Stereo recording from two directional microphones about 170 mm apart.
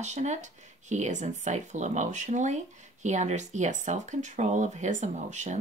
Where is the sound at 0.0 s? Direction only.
40° right (ahead or behind).